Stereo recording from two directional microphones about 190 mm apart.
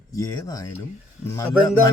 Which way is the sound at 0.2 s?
20° left (ahead or behind).